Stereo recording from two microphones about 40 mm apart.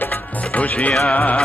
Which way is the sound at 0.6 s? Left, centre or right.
Left.